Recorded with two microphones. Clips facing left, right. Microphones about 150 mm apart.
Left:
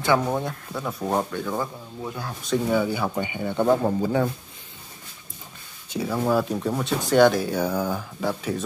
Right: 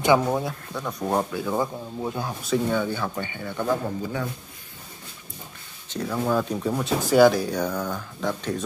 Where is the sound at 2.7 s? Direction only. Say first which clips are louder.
Left 2 dB; 10° left (ahead or behind).